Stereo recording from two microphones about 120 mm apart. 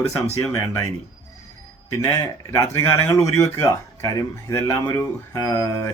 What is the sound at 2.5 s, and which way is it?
Speech, 25° left (ahead or behind).